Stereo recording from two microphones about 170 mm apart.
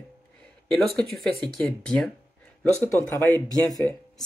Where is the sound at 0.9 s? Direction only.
Centre (ahead or behind).